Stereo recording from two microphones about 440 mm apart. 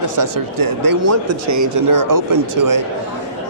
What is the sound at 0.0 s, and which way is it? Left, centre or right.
Speech, right.